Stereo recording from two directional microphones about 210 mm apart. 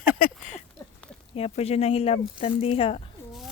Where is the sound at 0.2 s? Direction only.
35° left (ahead or behind).